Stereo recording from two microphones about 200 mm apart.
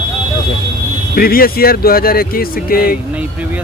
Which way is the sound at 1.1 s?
45° left (ahead or behind).